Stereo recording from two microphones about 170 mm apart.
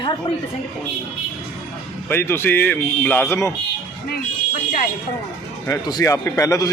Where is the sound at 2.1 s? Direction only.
15° left (ahead or behind).